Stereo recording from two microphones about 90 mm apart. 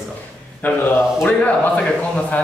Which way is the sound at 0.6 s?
20° left (ahead or behind).